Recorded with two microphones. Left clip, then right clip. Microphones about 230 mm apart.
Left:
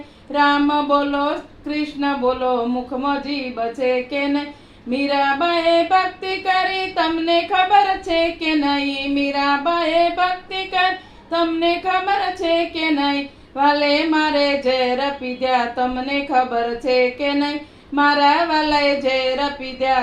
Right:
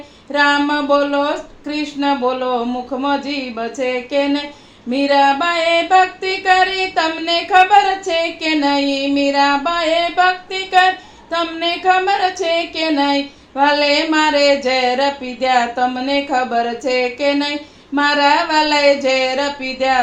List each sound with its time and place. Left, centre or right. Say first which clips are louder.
0.3 s child singing: right 2 dB; right